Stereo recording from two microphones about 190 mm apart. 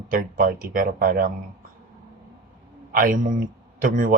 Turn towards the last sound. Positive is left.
turn(degrees=-45)  # may be behind; listen again after turning